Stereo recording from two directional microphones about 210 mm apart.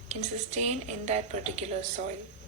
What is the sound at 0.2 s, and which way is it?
A woman's voice, 30° right (ahead or behind).